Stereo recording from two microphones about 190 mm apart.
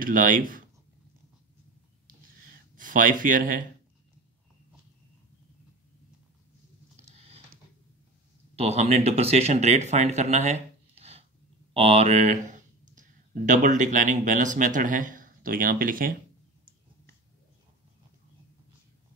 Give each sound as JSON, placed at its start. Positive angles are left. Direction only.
{"t": 0.0, "sound": "speech", "side_deg": -45}
{"t": 2.7, "sound": "speech", "side_deg": -45}
{"t": 7.0, "sound": "a sound", "side_deg": -35}
{"t": 8.5, "sound": "speech", "side_deg": -35}